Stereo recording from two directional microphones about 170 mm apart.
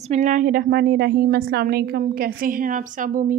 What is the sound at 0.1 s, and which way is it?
A woman's voice, 45° right (ahead or behind).